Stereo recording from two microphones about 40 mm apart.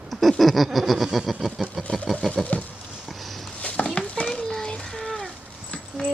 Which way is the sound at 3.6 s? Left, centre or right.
Left.